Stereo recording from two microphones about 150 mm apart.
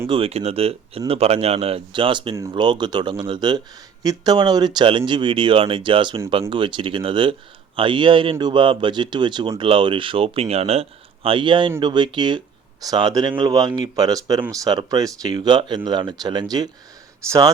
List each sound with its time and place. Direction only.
0.1 s speech: 40° right (ahead or behind); by 17.5 s 20° right (ahead or behind)